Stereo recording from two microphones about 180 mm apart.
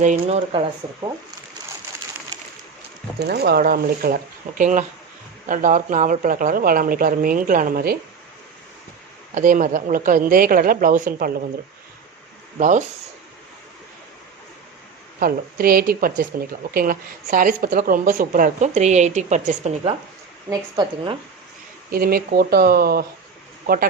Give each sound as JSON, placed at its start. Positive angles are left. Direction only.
{"t": 0.0, "sound": "a woman's voice", "side_deg": -45}
{"t": 3.2, "sound": "a woman's voice", "side_deg": -65}
{"t": 9.3, "sound": "a woman's voice", "side_deg": -45}
{"t": 12.5, "sound": "a woman's voice", "side_deg": -45}
{"t": 15.2, "sound": "a woman's voice", "side_deg": -55}
{"t": 20.5, "sound": "a woman's voice", "side_deg": -25}
{"t": 21.9, "sound": "speech", "side_deg": -55}